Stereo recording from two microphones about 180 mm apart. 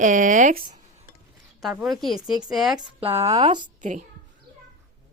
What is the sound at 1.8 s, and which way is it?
Speech, centre (ahead or behind).